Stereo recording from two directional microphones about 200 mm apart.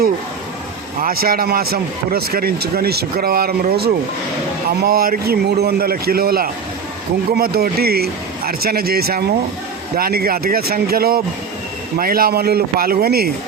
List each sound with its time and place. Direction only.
1.0 s speech: 50° right (ahead or behind)